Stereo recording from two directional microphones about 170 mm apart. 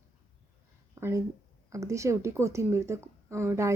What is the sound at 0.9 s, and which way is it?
A woman's voice, 15° right (ahead or behind).